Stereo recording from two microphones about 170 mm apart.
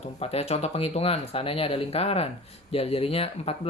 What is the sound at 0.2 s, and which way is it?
Speech, 35° left (ahead or behind).